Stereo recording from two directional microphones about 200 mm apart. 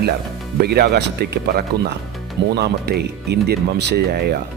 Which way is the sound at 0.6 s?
50° right (ahead or behind).